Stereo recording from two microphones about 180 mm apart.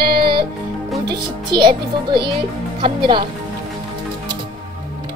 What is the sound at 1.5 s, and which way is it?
A child's voice, 25° right (ahead or behind).